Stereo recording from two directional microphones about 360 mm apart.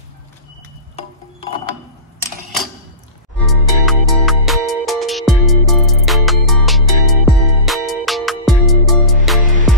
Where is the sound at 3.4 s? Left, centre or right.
Centre.